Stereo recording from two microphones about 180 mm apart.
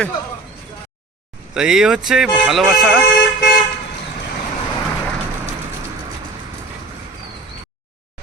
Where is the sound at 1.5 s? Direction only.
5° right (ahead or behind).